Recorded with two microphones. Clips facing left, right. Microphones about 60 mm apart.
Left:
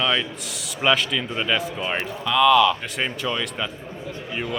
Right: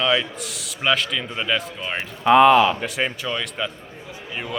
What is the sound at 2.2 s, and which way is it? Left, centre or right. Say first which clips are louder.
Speech: right 5 dB; right.